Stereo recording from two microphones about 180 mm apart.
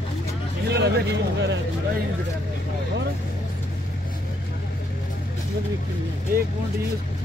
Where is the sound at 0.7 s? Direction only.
70° right (ahead or behind).